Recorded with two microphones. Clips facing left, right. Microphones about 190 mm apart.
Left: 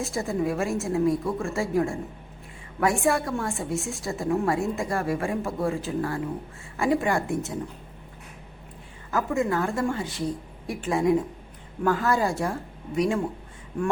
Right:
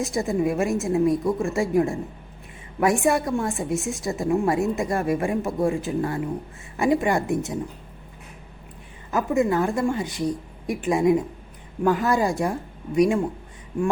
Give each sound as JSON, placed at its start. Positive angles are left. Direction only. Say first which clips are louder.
{"t": 0.0, "sound": "a woman's voice", "louder": "right 4 dB", "side_deg": -20}
{"t": 9.1, "sound": "a woman's voice", "louder": "right 4 dB", "side_deg": -20}